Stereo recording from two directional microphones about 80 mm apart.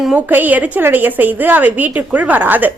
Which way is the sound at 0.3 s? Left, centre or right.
Right.